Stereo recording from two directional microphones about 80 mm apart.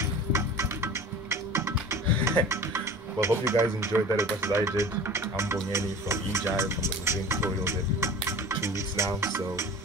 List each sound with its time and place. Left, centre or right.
0.0 s music: right
2.4 s speech: right